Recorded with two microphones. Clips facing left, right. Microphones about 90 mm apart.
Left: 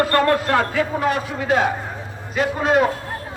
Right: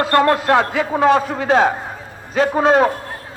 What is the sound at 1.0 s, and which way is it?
Speech, 90° right.